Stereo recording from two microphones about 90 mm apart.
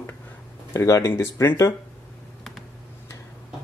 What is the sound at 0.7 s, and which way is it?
Speech, 35° left (ahead or behind).